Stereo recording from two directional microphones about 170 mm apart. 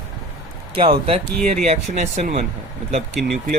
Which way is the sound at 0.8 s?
35° right (ahead or behind).